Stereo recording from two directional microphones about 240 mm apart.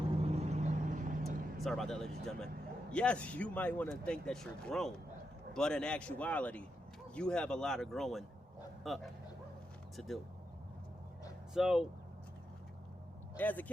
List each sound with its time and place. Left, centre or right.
0.2 s vehicle: right
1.5 s speech: centre
11.5 s speech: centre
13.3 s speech: centre